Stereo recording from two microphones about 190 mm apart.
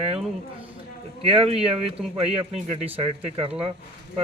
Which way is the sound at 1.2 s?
30° right (ahead or behind).